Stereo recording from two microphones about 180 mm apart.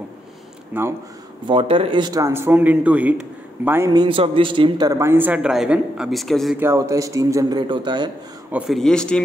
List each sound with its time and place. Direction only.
0.7 s speech: 10° right (ahead or behind)
1.5 s speech: 30° right (ahead or behind); by 6.6 s centre (ahead or behind)
6.6 s a man's voice: 15° right (ahead or behind)
8.5 s speech: 5° right (ahead or behind)